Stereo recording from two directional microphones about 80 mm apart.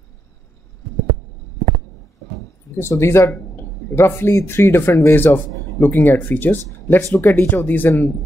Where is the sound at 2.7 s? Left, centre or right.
Left.